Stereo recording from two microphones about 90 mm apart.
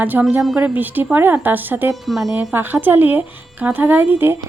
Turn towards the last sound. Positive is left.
turn(degrees=-25)  # may be behind; listen again after turning